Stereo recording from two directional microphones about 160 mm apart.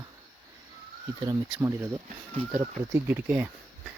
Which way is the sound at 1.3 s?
20° right (ahead or behind).